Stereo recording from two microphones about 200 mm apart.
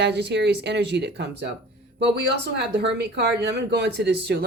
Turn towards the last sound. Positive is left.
turn(degrees=-55)  # may be behind; listen again after turning